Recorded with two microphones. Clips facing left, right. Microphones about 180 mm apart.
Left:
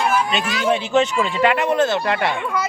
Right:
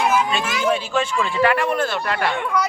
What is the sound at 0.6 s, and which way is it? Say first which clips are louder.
Speech: left 4 dB; 20° left (ahead or behind).